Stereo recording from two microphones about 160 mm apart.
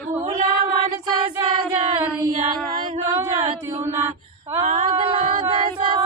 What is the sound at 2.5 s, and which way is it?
Music, 30° right (ahead or behind).